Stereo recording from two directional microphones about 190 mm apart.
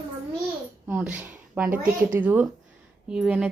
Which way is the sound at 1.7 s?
45° right (ahead or behind).